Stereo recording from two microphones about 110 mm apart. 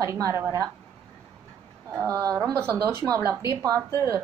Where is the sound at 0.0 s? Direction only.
30° right (ahead or behind).